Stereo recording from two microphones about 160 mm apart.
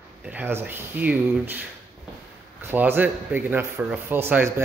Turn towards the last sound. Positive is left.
turn(degrees=-15)  # may be behind; listen again after turning